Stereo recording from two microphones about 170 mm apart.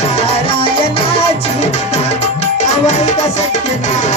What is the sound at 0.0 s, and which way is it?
Music, 40° left (ahead or behind).